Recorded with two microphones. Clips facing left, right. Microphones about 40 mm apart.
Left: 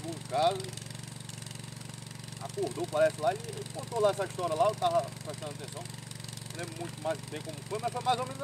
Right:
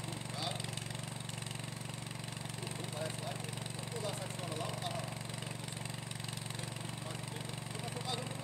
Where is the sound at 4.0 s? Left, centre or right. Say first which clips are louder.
Left 16 dB; left.